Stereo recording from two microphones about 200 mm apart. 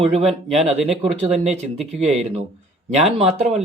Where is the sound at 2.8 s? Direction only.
30° right (ahead or behind).